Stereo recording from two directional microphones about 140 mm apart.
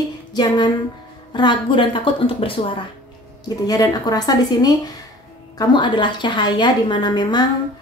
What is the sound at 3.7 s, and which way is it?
A woman's voice, 25° left (ahead or behind).